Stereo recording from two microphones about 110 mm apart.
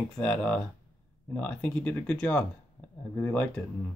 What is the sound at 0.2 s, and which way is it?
Speech, 10° left (ahead or behind).